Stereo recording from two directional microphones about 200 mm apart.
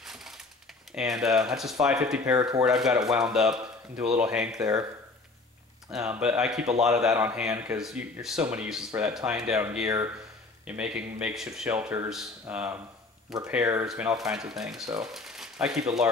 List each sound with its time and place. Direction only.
0.0 s a sound: centre (ahead or behind)
0.9 s speech: centre (ahead or behind)
4.6 s speech: 15° right (ahead or behind)
5.9 s speech: 5° right (ahead or behind)